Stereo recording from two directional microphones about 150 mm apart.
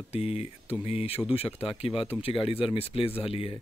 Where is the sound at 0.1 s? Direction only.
40° left (ahead or behind).